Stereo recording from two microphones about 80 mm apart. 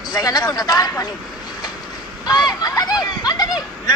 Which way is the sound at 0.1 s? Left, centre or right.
Left.